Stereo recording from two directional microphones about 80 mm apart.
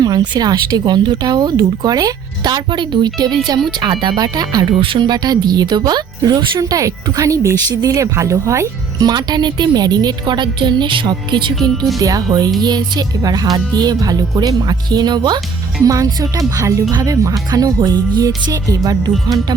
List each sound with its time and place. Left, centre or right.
0.0 s speech: right
6.6 s speech: right
7.7 s speech: right
7.9 s speech: right
9.0 s speech: right
11.9 s speech: right
15.8 s speech: right